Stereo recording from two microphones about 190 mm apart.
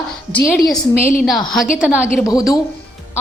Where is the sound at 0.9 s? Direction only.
45° left (ahead or behind).